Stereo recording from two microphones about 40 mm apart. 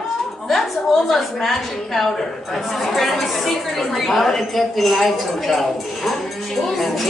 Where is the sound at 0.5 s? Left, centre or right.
Centre.